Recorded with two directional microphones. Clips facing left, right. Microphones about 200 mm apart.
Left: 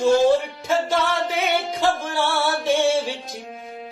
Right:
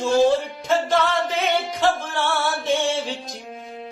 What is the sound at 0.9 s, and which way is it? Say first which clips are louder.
Music: right 1 dB; 10° left (ahead or behind).